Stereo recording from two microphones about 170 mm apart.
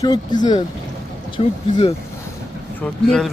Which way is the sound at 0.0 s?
25° left (ahead or behind).